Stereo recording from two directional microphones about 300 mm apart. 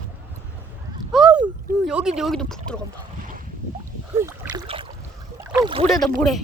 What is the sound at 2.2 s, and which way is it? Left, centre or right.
Speech, centre.